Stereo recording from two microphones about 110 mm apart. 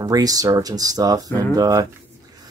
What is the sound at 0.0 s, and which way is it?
Speech, 35° right (ahead or behind).